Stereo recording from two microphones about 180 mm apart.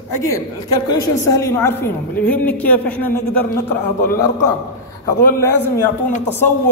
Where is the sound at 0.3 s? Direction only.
20° left (ahead or behind).